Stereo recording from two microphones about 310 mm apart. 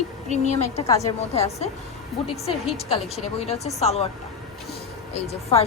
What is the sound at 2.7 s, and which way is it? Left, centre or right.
Speech, centre.